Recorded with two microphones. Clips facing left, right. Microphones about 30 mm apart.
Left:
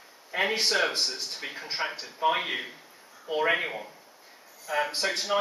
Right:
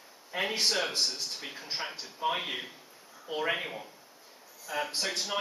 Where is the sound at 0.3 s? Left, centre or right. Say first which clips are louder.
Left 4 dB; centre.